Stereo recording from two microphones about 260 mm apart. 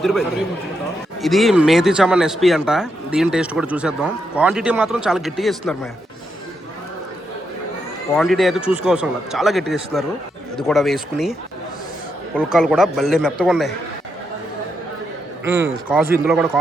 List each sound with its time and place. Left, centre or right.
0.0 s speech: centre
8.1 s speech: centre
12.4 s speech: centre
15.4 s a man's voice: centre